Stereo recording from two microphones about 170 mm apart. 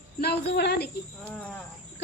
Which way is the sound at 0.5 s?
75° left (ahead or behind).